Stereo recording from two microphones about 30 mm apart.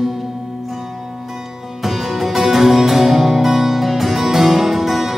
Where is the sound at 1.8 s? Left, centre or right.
Centre.